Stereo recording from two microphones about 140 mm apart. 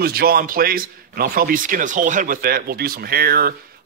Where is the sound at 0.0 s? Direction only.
90° right.